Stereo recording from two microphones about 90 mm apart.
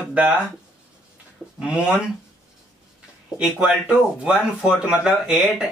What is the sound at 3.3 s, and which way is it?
Speech, 10° right (ahead or behind).